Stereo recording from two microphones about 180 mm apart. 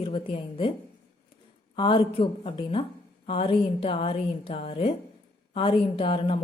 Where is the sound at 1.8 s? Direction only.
30° left (ahead or behind).